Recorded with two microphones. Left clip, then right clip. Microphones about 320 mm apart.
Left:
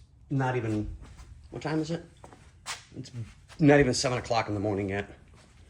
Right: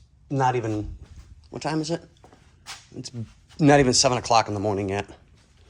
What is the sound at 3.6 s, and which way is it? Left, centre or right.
Speech, centre.